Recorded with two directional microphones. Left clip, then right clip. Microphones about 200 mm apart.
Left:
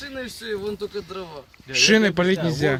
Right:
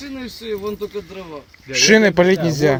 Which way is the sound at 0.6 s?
15° left (ahead or behind).